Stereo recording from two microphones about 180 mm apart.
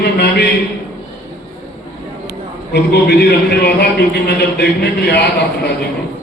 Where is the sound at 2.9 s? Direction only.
65° left (ahead or behind).